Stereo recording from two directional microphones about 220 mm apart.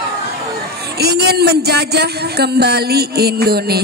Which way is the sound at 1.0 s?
45° right (ahead or behind).